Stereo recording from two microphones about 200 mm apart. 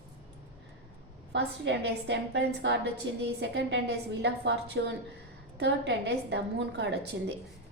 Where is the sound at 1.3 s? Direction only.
60° right (ahead or behind).